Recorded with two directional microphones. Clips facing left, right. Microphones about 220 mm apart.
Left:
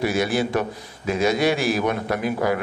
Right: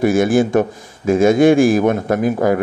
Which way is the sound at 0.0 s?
50° right (ahead or behind).